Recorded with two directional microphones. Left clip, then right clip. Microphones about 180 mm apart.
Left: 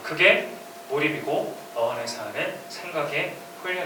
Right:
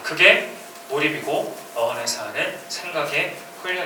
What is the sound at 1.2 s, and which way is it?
Speech, 40° left (ahead or behind).